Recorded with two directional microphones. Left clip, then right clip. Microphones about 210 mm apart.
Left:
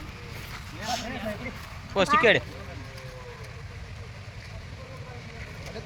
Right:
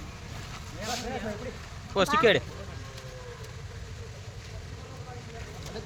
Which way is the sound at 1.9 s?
10° right (ahead or behind).